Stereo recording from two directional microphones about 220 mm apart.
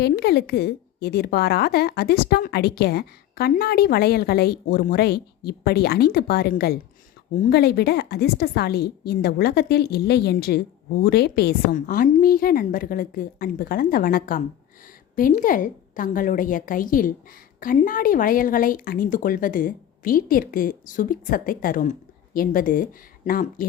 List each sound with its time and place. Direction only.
0.0 s a woman's voice: 45° left (ahead or behind)